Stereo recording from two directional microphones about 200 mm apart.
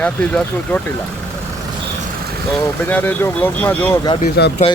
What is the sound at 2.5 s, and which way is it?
Speech, 10° left (ahead or behind).